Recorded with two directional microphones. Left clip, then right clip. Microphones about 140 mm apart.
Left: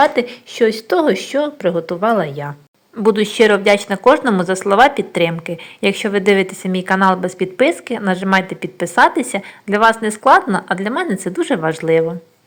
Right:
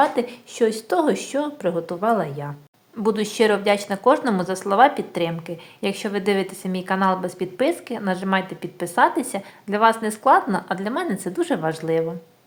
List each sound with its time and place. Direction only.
0.0 s a woman's voice: 20° left (ahead or behind)